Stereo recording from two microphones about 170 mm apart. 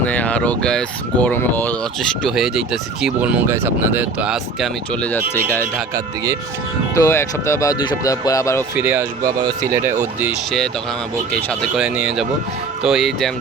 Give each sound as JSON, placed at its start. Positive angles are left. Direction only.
{"t": 0.0, "sound": "speech", "side_deg": 10}
{"t": 5.0, "sound": "speech", "side_deg": 10}
{"t": 6.9, "sound": "speech", "side_deg": 15}
{"t": 8.7, "sound": "speech", "side_deg": -10}
{"t": 11.3, "sound": "speech", "side_deg": 5}
{"t": 11.8, "sound": "speech", "side_deg": -5}